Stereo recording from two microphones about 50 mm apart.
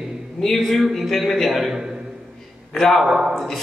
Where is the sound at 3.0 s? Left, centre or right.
Centre.